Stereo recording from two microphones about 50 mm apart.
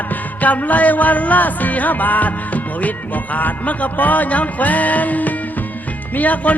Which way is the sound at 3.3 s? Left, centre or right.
Left.